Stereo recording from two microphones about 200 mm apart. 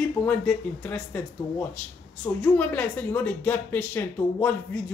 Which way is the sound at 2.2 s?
5° left (ahead or behind).